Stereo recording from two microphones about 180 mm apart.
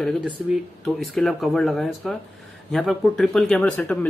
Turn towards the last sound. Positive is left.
turn(degrees=5)  # may be behind; listen again after turning